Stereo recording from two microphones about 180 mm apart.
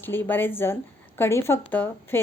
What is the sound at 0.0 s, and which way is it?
A woman's voice, 10° left (ahead or behind).